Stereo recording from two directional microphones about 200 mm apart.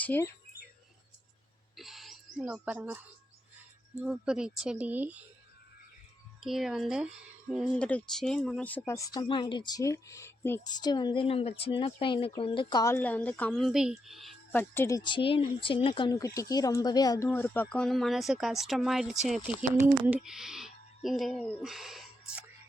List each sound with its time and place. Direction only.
0.0 s speech: 10° left (ahead or behind)
1.7 s owl: centre (ahead or behind)
2.4 s speech: 5° right (ahead or behind)
4.0 s speech: 5° right (ahead or behind)
6.4 s speech: centre (ahead or behind)